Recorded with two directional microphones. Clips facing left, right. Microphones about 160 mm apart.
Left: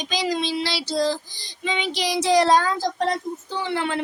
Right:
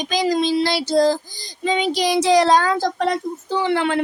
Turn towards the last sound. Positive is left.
turn(degrees=-70)  # may be behind; listen again after turning